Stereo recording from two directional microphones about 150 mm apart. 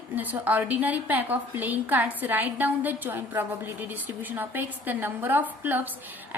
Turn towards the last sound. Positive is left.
turn(degrees=-15)  # may be behind; listen again after turning